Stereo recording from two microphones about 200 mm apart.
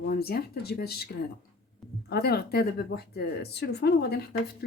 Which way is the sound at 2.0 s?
50° left (ahead or behind).